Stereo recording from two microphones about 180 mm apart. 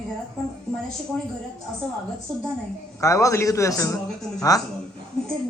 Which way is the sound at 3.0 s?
15° left (ahead or behind).